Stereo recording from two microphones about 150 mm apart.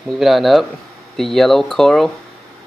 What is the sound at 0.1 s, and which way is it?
Speech, centre (ahead or behind).